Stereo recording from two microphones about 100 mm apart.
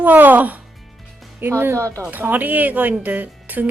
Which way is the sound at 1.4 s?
20° right (ahead or behind).